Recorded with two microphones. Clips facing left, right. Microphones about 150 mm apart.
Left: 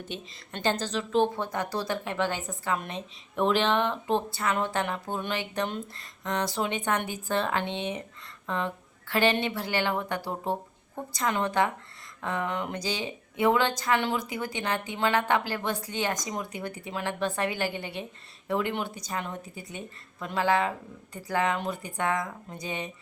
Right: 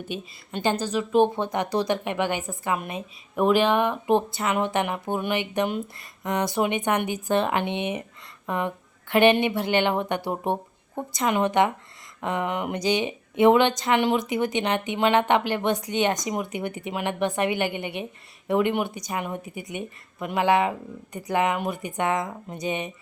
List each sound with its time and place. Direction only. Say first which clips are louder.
0.1 s speech: right 6 dB; 15° right (ahead or behind)